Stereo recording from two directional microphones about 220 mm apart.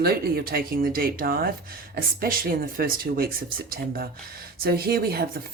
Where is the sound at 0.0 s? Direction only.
45° right (ahead or behind).